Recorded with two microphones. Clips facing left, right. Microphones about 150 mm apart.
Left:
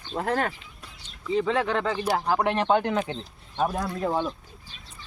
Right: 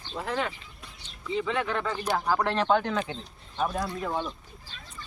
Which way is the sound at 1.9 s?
15° left (ahead or behind).